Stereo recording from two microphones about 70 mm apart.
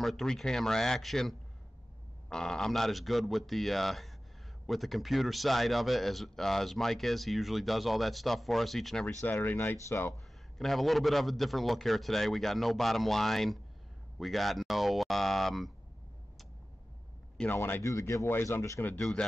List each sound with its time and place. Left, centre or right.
0.0 s speech: centre
9.0 s speech: left
9.8 s speech: left
10.1 s speech: centre
14.1 s a sound: centre
17.5 s speech: left
17.8 s speech: left
18.9 s speech: centre